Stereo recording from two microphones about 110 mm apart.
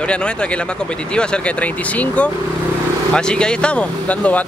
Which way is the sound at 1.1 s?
10° left (ahead or behind).